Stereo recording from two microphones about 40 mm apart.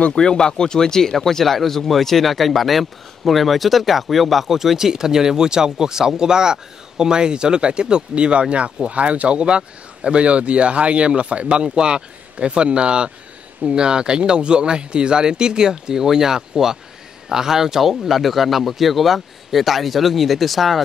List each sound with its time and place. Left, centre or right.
0.1 s speech: centre